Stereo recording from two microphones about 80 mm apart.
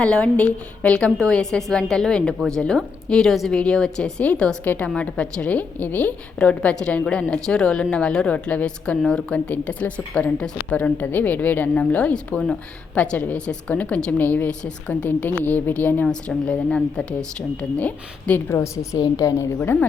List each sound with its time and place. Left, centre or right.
0.0 s a woman's voice: centre
9.3 s a woman's voice: centre; by 19.5 s left
19.5 s a woman's voice: centre